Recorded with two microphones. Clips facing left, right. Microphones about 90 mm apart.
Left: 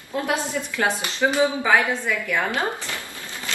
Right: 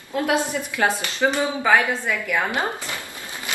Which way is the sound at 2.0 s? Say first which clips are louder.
Even; 15° right (ahead or behind).